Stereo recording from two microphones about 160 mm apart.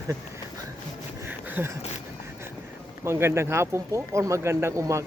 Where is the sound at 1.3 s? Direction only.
10° right (ahead or behind).